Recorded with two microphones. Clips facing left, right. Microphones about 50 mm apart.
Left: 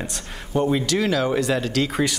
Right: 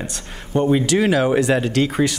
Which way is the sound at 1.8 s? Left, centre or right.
Centre.